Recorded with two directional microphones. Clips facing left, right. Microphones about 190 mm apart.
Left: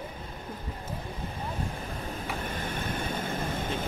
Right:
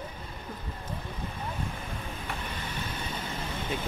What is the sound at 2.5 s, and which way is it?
Vehicle, 50° left (ahead or behind).